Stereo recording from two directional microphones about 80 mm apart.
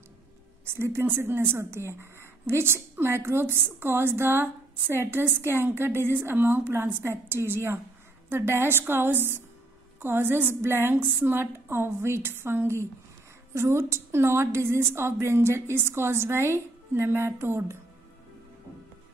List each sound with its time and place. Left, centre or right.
0.7 s a woman's voice: right